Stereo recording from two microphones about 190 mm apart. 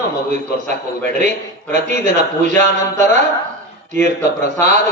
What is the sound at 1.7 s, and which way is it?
A man's voice, 45° right (ahead or behind).